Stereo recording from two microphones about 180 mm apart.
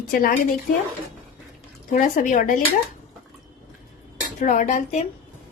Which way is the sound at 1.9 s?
45° left (ahead or behind).